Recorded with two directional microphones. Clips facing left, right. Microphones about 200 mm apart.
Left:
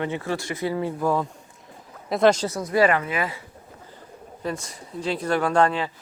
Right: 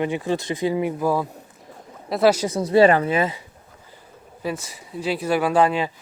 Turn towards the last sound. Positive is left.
turn(degrees=-15)  # may be behind; listen again after turning